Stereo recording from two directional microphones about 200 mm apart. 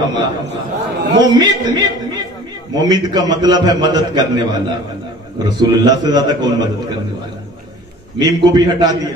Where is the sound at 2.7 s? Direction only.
20° right (ahead or behind).